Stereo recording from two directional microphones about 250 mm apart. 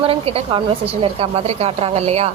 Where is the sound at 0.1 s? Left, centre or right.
Right.